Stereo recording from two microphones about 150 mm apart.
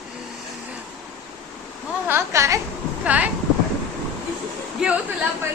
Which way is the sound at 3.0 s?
10° right (ahead or behind).